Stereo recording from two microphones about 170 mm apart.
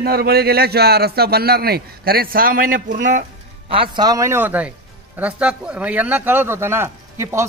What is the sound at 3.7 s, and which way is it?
A man's voice, 30° right (ahead or behind).